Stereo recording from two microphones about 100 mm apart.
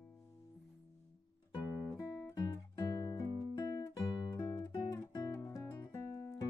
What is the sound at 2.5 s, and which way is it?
Music, 30° left (ahead or behind).